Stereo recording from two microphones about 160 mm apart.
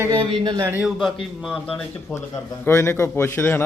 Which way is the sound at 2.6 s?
15° left (ahead or behind).